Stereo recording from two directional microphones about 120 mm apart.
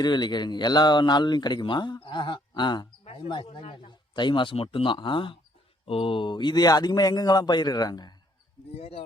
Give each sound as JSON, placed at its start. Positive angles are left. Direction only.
{"t": 0.0, "sound": "a man's voice", "side_deg": 35}
{"t": 8.7, "sound": "speech", "side_deg": 55}